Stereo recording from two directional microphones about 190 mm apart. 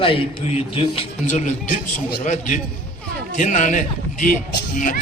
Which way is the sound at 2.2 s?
40° left (ahead or behind).